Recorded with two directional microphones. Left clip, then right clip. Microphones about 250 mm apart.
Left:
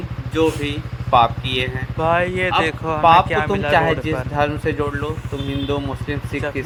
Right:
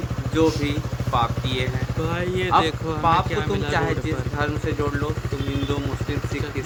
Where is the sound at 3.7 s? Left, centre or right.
Left.